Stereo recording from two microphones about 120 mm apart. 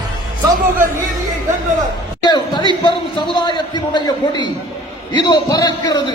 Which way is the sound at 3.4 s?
40° left (ahead or behind).